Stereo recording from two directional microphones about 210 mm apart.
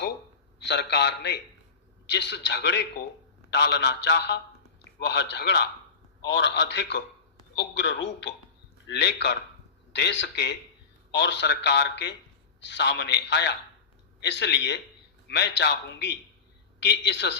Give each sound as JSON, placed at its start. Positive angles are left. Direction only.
{"t": 0.6, "sound": "a man's voice", "side_deg": 55}